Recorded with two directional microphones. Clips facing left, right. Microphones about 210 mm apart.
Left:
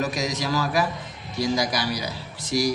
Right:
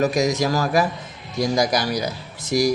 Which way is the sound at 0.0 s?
45° right (ahead or behind).